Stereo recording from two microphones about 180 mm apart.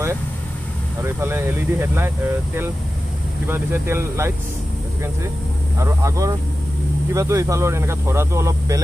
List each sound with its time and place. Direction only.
1.0 s speech: 15° right (ahead or behind)
5.8 s speech: 15° right (ahead or behind)